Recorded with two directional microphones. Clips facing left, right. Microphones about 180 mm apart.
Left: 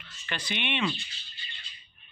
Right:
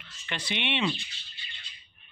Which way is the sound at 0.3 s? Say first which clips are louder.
Right 1 dB; 25° right (ahead or behind).